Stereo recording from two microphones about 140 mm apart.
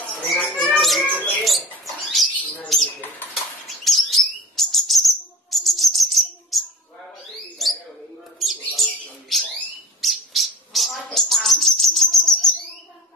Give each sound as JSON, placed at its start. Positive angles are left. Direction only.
{"t": 0.3, "sound": "a sound", "side_deg": 0}
{"t": 1.9, "sound": "bird", "side_deg": 0}
{"t": 7.6, "sound": "bird", "side_deg": 0}
{"t": 11.1, "sound": "insect", "side_deg": 0}